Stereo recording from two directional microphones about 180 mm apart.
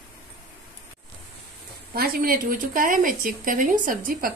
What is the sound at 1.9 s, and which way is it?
Speech, 55° right (ahead or behind).